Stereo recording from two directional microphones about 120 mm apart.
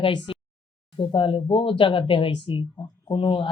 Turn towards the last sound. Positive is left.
turn(degrees=45)  # may be behind; listen again after turning